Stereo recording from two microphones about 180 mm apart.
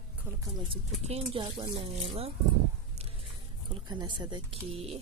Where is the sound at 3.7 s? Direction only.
25° right (ahead or behind).